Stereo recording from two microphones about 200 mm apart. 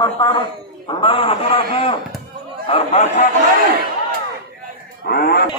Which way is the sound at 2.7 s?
30° left (ahead or behind).